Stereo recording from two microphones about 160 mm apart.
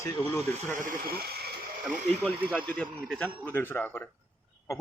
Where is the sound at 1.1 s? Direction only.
70° right (ahead or behind).